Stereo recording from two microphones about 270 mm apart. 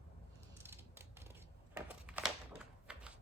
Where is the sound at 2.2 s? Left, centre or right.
Centre.